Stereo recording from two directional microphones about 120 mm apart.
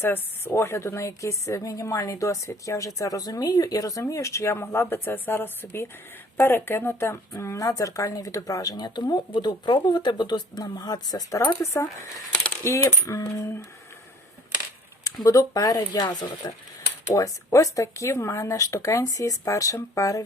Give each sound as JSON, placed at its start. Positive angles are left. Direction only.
{"t": 0.0, "sound": "a woman's voice", "side_deg": 20}
{"t": 15.0, "sound": "a woman's voice", "side_deg": 30}